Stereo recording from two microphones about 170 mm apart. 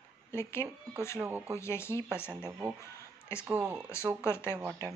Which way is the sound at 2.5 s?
15° right (ahead or behind).